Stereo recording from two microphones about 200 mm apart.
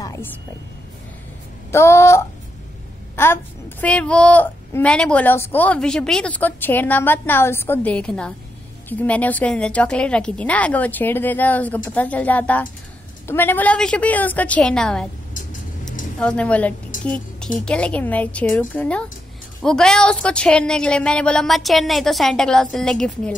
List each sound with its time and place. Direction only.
0.0 s a sound: 15° left (ahead or behind)
1.7 s a child's voice: 15° left (ahead or behind)
16.2 s a child's voice: 5° left (ahead or behind)